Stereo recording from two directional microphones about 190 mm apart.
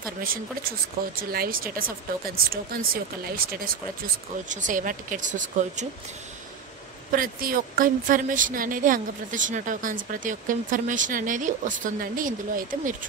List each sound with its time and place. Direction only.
0.2 s a woman's voice: 50° right (ahead or behind)
7.1 s a woman's voice: 50° right (ahead or behind)